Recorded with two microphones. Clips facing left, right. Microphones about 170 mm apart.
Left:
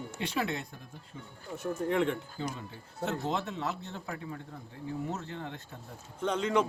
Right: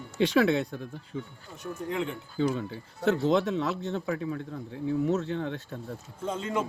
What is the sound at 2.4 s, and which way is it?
Speech, 90° right.